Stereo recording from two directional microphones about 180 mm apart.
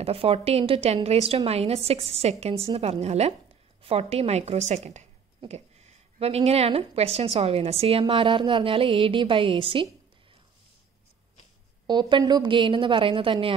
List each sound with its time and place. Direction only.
0.0 s a woman's voice: 30° right (ahead or behind)
11.8 s a woman's voice: 25° right (ahead or behind)